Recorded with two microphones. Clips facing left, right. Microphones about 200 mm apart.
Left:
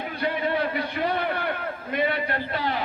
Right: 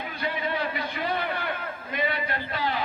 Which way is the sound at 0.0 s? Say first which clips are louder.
Left 4 dB; 55° left (ahead or behind).